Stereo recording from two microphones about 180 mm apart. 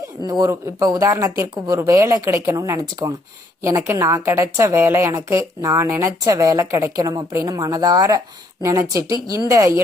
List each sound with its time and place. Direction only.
0.3 s a woman's voice: 20° right (ahead or behind)